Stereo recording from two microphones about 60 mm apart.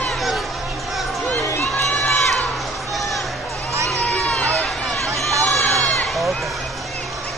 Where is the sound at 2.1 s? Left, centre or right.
Centre.